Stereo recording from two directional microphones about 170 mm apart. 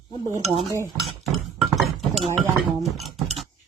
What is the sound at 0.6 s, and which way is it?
Speech, 20° right (ahead or behind).